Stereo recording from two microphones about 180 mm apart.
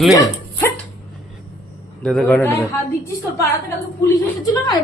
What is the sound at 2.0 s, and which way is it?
Speech, centre (ahead or behind).